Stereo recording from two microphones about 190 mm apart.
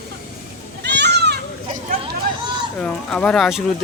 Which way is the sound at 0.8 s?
65° right (ahead or behind).